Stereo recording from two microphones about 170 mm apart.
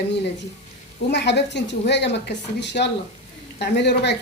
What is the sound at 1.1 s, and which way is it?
A woman's voice, 90° left.